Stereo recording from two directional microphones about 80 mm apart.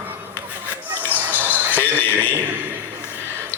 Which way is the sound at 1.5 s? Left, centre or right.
Left.